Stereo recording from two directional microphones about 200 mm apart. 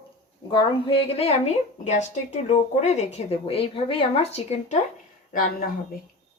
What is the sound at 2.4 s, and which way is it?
A woman's voice, 35° left (ahead or behind).